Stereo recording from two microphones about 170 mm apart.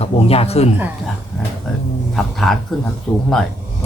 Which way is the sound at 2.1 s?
Centre (ahead or behind).